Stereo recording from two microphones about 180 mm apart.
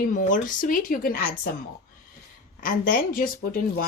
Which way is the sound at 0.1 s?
45° left (ahead or behind).